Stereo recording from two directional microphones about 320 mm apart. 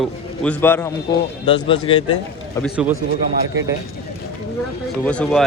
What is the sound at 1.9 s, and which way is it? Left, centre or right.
Speech, centre.